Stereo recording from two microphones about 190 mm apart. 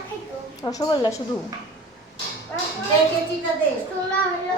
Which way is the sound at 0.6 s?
20° left (ahead or behind).